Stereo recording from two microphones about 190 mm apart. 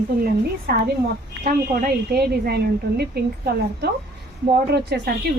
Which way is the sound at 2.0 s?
55° right (ahead or behind).